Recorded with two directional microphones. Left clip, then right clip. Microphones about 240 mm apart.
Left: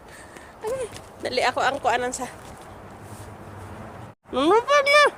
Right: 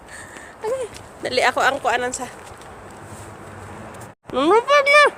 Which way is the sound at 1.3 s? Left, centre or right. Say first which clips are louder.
Right 4 dB; centre.